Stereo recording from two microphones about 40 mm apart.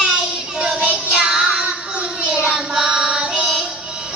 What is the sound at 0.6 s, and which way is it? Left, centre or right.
Music, right.